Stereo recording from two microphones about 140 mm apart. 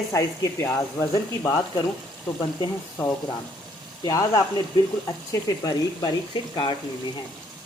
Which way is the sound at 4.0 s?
25° left (ahead or behind).